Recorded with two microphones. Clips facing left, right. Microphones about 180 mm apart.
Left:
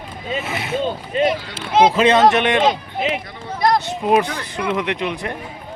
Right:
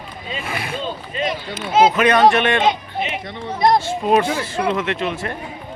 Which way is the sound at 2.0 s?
25° left (ahead or behind).